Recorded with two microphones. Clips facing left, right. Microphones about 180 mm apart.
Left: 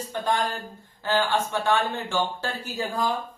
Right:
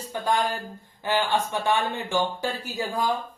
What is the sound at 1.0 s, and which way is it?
Speech, 15° right (ahead or behind).